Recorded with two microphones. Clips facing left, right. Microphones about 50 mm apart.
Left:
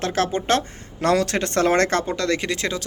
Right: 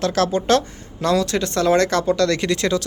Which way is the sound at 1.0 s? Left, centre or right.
Left.